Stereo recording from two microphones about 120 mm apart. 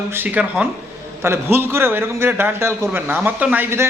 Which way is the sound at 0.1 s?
15° right (ahead or behind).